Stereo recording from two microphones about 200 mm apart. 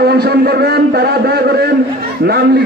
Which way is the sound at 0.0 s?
50° right (ahead or behind).